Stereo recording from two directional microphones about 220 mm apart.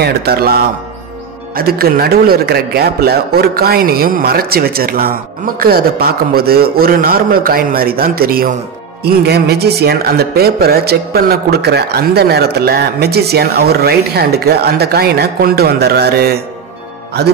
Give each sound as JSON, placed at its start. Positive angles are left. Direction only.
{"t": 0.0, "sound": "speech", "side_deg": -45}